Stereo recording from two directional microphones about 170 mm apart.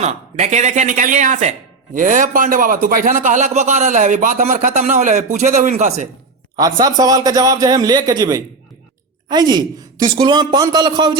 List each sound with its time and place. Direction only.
0.0 s speech: 40° right (ahead or behind)
6.7 s a man's voice: 25° right (ahead or behind)